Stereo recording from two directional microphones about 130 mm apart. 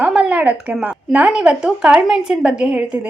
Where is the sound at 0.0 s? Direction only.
10° right (ahead or behind).